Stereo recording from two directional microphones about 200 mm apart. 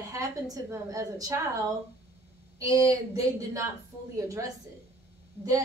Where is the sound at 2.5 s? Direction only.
15° right (ahead or behind).